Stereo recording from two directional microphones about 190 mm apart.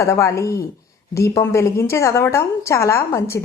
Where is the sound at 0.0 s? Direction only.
15° left (ahead or behind).